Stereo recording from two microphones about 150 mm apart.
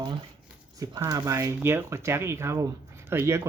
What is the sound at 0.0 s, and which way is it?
Speech, 30° right (ahead or behind).